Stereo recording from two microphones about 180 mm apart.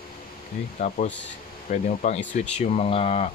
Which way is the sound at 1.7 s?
45° left (ahead or behind).